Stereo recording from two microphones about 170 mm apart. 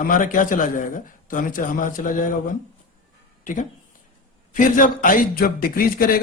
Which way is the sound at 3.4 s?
50° left (ahead or behind).